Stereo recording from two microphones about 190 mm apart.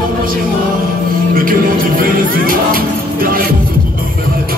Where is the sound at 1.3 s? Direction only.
50° right (ahead or behind).